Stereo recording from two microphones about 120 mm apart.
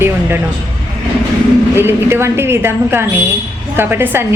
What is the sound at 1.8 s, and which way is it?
A woman's voice, 20° right (ahead or behind).